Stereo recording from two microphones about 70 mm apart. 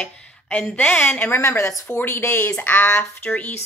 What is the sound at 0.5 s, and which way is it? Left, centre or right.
A woman's voice, left.